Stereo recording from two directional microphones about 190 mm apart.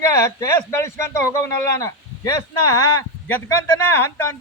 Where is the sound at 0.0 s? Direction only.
15° left (ahead or behind).